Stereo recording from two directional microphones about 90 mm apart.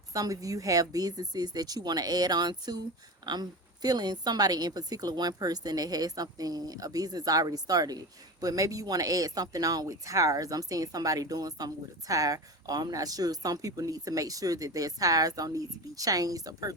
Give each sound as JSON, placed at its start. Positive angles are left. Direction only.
{"t": 0.1, "sound": "a woman's voice", "side_deg": -40}